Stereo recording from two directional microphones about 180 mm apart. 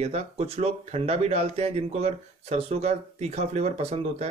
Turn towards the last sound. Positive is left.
turn(degrees=-35)  # may be behind; listen again after turning